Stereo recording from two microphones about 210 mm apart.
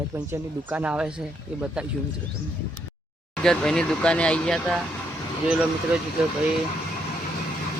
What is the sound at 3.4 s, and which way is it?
Speech, 5° left (ahead or behind).